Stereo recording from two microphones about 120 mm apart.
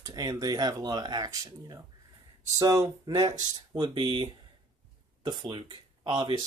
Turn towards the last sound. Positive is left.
turn(degrees=-40)  # may be behind; listen again after turning